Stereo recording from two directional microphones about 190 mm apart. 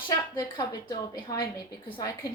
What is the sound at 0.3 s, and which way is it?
A woman's voice, 20° left (ahead or behind).